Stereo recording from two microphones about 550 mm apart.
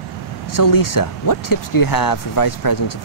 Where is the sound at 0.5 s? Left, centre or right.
Left.